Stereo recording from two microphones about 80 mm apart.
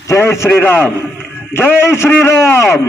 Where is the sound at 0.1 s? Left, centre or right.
Left.